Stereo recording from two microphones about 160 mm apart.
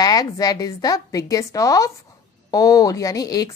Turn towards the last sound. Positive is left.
turn(degrees=20)  # may be behind; listen again after turning